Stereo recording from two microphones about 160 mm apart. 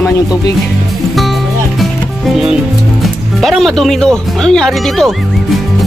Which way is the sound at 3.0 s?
Centre (ahead or behind).